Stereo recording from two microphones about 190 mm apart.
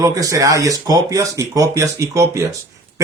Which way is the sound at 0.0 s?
15° right (ahead or behind).